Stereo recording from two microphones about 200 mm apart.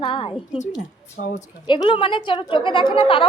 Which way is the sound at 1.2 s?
50° left (ahead or behind).